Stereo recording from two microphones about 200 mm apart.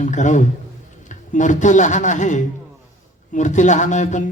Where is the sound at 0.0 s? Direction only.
40° left (ahead or behind).